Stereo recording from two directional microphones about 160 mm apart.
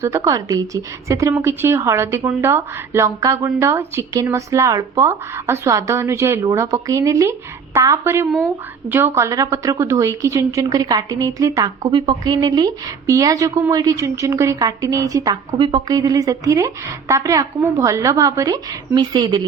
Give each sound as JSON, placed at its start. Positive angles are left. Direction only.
{"t": 0.3, "sound": "a woman's voice", "side_deg": -20}